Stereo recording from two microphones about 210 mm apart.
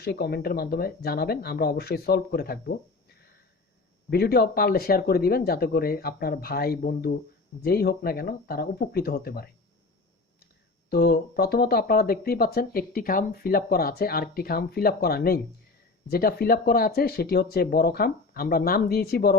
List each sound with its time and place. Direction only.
0.0 s speech: 50° left (ahead or behind)
4.1 s speech: 50° left (ahead or behind)
10.8 s speech: 50° left (ahead or behind)